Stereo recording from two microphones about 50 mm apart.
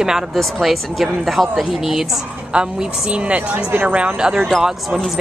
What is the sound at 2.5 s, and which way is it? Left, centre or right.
A woman's voice, centre.